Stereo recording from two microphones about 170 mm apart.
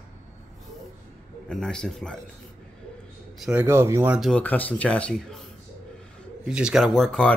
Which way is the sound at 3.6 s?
15° right (ahead or behind).